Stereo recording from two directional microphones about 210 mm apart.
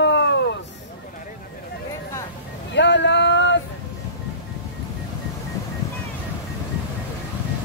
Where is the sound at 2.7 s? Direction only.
60° left (ahead or behind).